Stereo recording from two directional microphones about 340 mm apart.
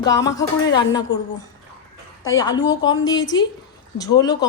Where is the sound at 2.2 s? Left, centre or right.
Centre.